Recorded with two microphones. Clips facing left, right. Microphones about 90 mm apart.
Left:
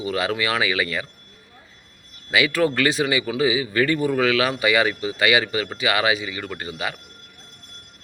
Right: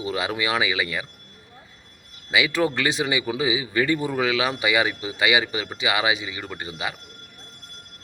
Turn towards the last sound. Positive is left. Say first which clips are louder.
# left 2 dB
turn(degrees=-15)  # may be behind; listen again after turning